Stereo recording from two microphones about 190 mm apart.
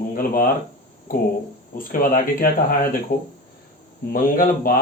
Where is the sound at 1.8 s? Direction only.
45° left (ahead or behind).